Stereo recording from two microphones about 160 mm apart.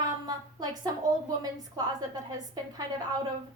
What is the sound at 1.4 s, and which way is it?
Speech, 25° right (ahead or behind).